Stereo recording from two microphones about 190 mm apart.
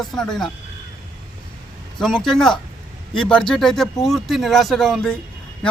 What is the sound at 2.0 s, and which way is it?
A man's voice, 5° left (ahead or behind).